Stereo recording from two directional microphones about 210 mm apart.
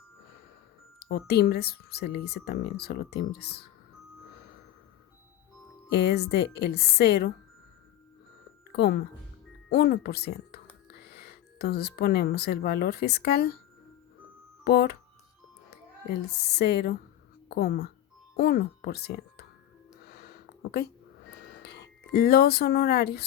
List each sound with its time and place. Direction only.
1.0 s speech: 50° left (ahead or behind)
5.9 s speech: 50° left (ahead or behind)
8.7 s speech: 50° left (ahead or behind)
14.6 s speech: 50° left (ahead or behind)
16.0 s speech: 50° left (ahead or behind)
20.1 s a sound: 50° left (ahead or behind)
21.4 s speech: 50° left (ahead or behind)